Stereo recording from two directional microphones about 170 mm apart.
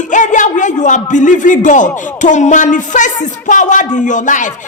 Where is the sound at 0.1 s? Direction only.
45° left (ahead or behind).